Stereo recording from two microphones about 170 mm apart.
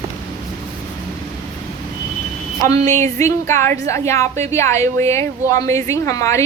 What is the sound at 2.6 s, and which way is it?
A woman's voice, 20° left (ahead or behind).